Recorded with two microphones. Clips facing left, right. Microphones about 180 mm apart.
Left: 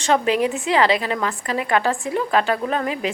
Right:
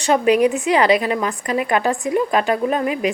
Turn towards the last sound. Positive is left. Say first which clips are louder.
# right 4 dB
turn(degrees=-15)  # may be behind; listen again after turning